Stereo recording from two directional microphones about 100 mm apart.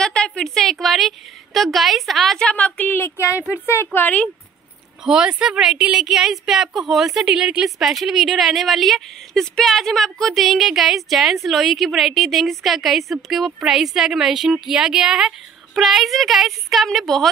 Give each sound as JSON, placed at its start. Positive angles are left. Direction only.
{"t": 0.0, "sound": "a woman's voice", "side_deg": 10}
{"t": 3.2, "sound": "a woman's voice", "side_deg": -15}
{"t": 3.7, "sound": "speech", "side_deg": 20}
{"t": 5.0, "sound": "a woman's voice", "side_deg": -10}